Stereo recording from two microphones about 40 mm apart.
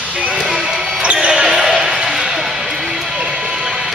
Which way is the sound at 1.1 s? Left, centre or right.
Centre.